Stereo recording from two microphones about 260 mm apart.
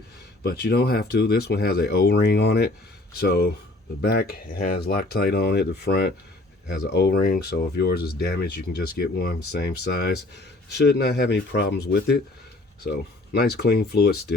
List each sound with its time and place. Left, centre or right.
0.4 s speech: left